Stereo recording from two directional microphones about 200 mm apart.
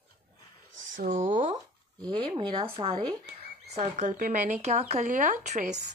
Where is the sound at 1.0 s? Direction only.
40° right (ahead or behind).